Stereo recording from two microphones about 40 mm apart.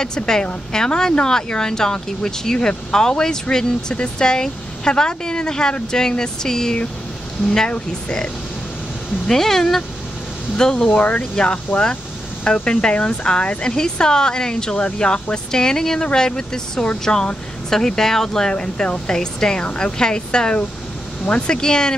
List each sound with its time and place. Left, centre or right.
0.7 s speech: centre
9.3 s speech: centre
10.9 s speech: left
11.3 s speech: left
15.5 s speech: centre